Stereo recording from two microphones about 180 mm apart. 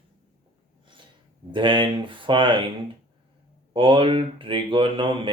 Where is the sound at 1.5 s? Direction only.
25° right (ahead or behind).